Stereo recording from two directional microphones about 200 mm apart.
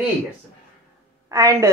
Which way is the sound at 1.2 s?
15° right (ahead or behind).